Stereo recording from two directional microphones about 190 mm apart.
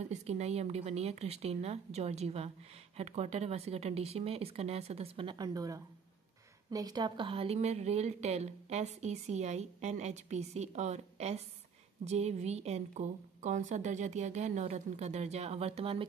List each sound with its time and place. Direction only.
0.0 s a woman's voice: 35° right (ahead or behind)